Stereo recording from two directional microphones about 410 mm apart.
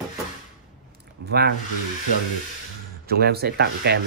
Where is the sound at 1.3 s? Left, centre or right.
Right.